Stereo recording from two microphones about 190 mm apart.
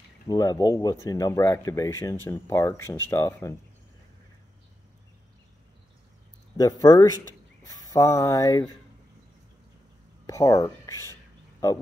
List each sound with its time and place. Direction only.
0.3 s speech: 20° left (ahead or behind)
6.5 s speech: 20° left (ahead or behind)
10.2 s speech: 15° left (ahead or behind)